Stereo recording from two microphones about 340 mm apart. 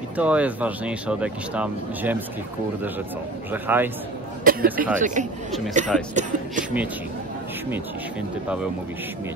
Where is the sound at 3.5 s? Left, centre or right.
Centre.